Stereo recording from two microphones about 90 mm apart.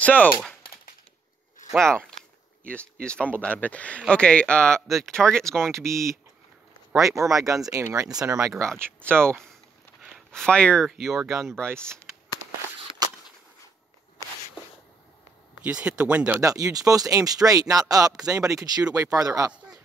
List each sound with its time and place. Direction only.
0.0 s speech: 20° left (ahead or behind)
1.7 s speech: 5° left (ahead or behind)
5.7 s speech: 35° right (ahead or behind)
10.0 s a sound: 5° right (ahead or behind)
10.4 s speech: 10° left (ahead or behind)
10.9 s speech: 5° right (ahead or behind)
15.6 s speech: 15° right (ahead or behind)
16.3 s speech: 40° right (ahead or behind)